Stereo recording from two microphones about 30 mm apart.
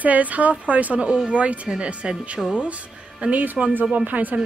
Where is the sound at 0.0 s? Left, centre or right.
Right.